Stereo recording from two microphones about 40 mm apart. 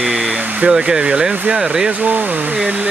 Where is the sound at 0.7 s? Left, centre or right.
Centre.